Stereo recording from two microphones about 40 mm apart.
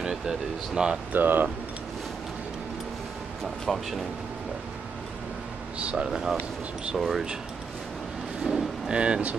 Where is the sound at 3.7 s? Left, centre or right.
Centre.